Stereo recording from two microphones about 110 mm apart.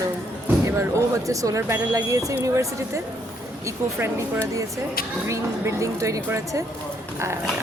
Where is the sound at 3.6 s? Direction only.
25° right (ahead or behind).